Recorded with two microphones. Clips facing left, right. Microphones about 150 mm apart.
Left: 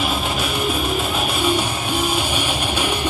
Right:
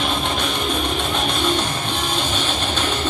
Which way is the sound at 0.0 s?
5° left (ahead or behind).